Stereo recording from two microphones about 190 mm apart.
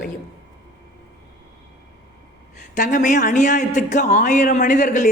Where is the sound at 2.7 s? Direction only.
40° left (ahead or behind).